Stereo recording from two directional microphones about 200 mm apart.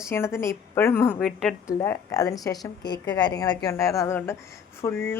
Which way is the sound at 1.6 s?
15° left (ahead or behind).